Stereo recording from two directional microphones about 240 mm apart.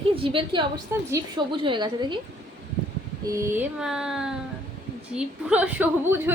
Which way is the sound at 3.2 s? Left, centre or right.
Centre.